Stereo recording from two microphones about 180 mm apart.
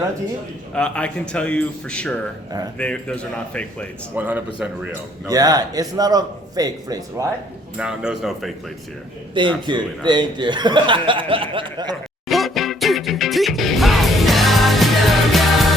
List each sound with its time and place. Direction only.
0.7 s a man's voice: 5° left (ahead or behind)
4.1 s speech: 10° right (ahead or behind)
5.2 s speech: 20° right (ahead or behind)
7.8 s speech: 5° right (ahead or behind)
9.6 s speech: 25° right (ahead or behind)
12.3 s music: centre (ahead or behind)